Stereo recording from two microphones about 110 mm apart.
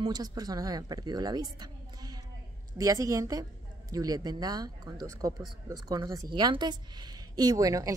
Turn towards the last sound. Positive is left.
turn(degrees=-30)  # may be behind; listen again after turning